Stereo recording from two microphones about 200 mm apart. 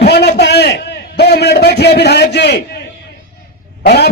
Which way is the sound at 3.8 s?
55° left (ahead or behind).